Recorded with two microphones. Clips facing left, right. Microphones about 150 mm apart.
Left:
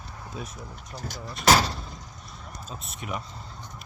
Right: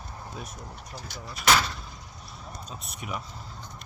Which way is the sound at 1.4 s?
40° left (ahead or behind).